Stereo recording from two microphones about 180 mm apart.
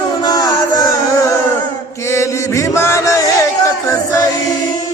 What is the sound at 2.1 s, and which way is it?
Chant, 15° left (ahead or behind).